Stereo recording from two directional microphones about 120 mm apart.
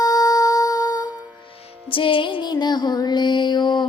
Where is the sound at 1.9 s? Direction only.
45° left (ahead or behind).